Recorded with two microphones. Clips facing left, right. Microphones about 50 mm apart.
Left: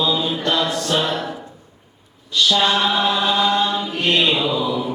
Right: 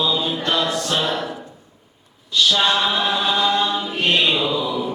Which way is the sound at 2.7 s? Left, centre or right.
Centre.